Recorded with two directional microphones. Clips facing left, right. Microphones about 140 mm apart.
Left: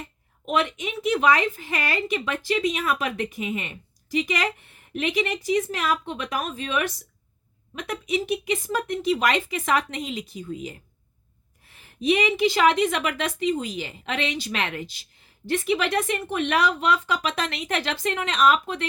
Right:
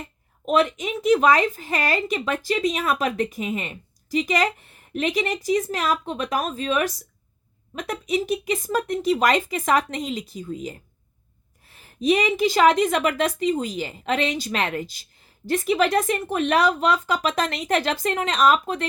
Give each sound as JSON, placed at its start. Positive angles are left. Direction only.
{"t": 0.4, "sound": "a woman's voice", "side_deg": -40}